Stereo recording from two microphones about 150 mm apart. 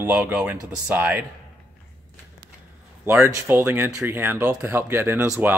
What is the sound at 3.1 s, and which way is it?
Speech, 20° right (ahead or behind).